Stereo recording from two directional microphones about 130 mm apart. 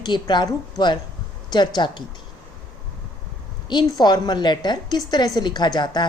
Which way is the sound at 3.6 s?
35° left (ahead or behind).